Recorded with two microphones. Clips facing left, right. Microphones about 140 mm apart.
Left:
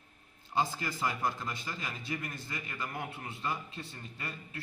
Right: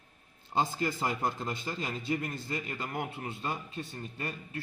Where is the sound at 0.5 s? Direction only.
25° right (ahead or behind).